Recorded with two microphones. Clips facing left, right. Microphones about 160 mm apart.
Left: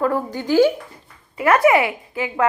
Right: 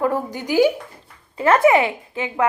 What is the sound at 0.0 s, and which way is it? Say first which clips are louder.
Speech: left 1 dB; 20° right (ahead or behind).